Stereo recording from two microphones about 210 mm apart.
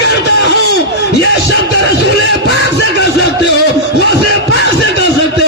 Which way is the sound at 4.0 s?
50° left (ahead or behind).